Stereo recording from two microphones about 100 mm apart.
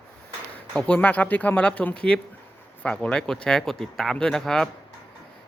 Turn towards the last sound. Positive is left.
turn(degrees=5)  # may be behind; listen again after turning